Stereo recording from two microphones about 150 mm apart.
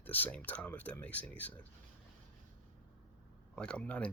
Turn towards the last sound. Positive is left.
turn(degrees=10)  # may be behind; listen again after turning